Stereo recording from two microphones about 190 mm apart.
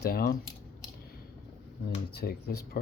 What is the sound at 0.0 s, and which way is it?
Speech, 55° left (ahead or behind).